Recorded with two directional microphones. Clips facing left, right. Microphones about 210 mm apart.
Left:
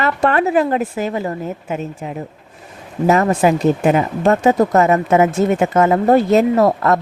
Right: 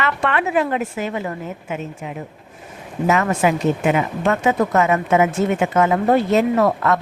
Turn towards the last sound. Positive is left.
turn(degrees=35)  # may be behind; listen again after turning